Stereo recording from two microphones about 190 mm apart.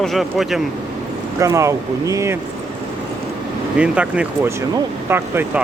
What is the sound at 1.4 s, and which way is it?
Speech, 15° right (ahead or behind).